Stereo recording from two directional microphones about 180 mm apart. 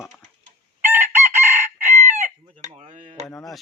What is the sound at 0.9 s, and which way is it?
Chicken, 15° right (ahead or behind).